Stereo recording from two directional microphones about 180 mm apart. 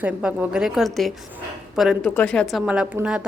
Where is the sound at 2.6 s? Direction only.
5° right (ahead or behind).